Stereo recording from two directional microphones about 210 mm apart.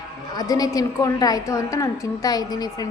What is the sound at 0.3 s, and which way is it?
A woman's voice, 20° left (ahead or behind).